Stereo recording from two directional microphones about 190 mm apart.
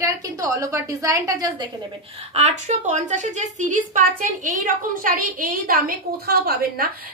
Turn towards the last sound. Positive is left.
turn(degrees=-55)  # may be behind; listen again after turning